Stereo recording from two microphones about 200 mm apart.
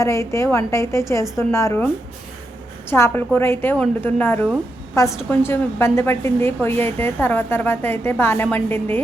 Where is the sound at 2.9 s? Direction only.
10° left (ahead or behind).